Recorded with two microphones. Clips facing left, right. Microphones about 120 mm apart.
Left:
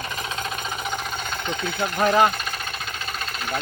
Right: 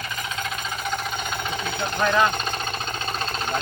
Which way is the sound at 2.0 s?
35° left (ahead or behind).